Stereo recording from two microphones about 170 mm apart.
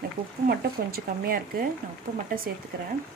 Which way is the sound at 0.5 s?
60° right (ahead or behind).